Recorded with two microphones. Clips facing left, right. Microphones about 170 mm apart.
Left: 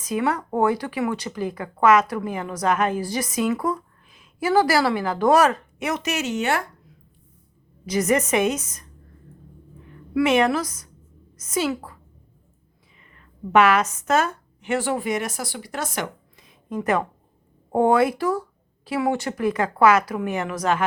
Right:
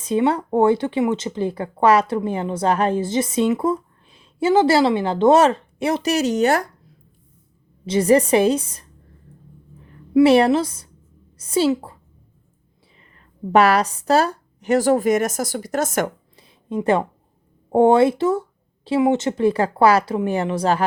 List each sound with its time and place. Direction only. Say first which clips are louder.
0.0 s speech: right 5 dB; 30° right (ahead or behind)
7.9 s a woman's voice: right 6 dB; 30° right (ahead or behind)
10.2 s a woman's voice: right 4 dB; 35° right (ahead or behind)
13.1 s a woman's voice: right 2 dB; 35° right (ahead or behind)
16.3 s a sound: right 4 dB; 30° right (ahead or behind)
17.7 s speech: right 4 dB; 25° right (ahead or behind)